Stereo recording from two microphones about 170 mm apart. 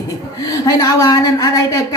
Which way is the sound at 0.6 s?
20° left (ahead or behind).